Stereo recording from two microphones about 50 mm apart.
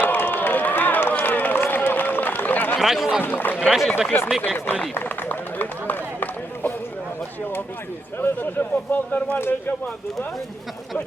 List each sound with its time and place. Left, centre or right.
0.0 s run: left
2.7 s speech: centre
3.2 s a man's voice: left
3.6 s speech: centre
4.1 s a man's voice: left
4.9 s run: left
8.2 s a man's voice: left